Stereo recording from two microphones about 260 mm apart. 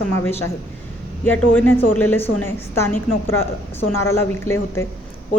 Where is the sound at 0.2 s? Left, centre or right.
Centre.